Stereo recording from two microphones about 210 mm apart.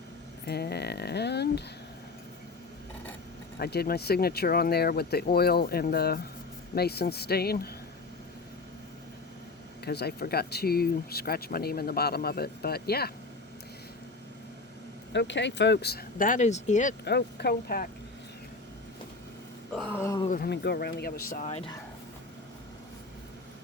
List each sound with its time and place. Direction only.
0.4 s speech: 50° left (ahead or behind)
3.6 s speech: 50° left (ahead or behind)
9.8 s speech: 50° left (ahead or behind)
15.1 s speech: 55° left (ahead or behind); by 16.9 s 35° left (ahead or behind)
17.1 s speech: 50° left (ahead or behind)
19.9 s a sound: 15° left (ahead or behind)
20.2 s speech: 45° left (ahead or behind)